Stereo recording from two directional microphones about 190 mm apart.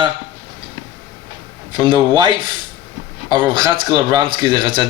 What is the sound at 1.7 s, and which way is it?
Speech, 25° right (ahead or behind).